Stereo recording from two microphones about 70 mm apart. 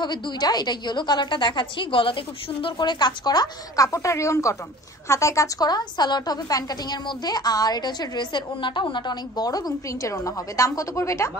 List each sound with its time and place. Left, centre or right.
0.0 s a woman's voice: left
2.8 s a woman's voice: left
3.7 s a woman's voice: left
5.6 s a woman's voice: left